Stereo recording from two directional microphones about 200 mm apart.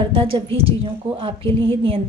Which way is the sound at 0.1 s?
30° right (ahead or behind).